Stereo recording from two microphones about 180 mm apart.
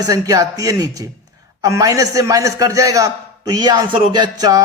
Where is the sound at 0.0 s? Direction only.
20° right (ahead or behind).